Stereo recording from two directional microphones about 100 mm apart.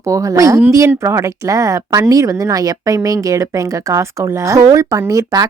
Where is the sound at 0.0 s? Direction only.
35° right (ahead or behind).